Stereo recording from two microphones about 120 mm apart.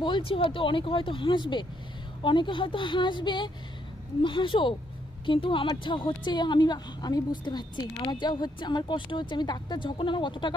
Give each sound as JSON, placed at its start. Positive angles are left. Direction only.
{"t": 0.0, "sound": "a woman's voice", "side_deg": 45}